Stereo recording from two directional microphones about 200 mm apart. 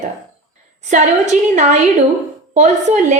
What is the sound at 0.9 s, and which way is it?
A woman's voice, 35° right (ahead or behind).